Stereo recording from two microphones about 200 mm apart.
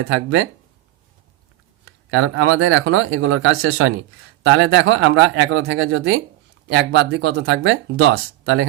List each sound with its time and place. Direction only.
0.0 s speech: 90° right
1.8 s speech: 90° right
4.4 s speech: 65° right (ahead or behind)
6.7 s speech: 60° right (ahead or behind); by 8.6 s 75° right (ahead or behind)